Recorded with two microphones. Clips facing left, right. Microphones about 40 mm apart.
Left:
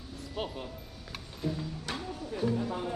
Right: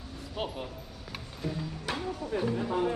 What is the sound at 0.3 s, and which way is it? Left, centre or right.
Speech, centre.